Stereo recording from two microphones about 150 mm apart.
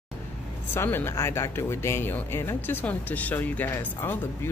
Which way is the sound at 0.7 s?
15° left (ahead or behind).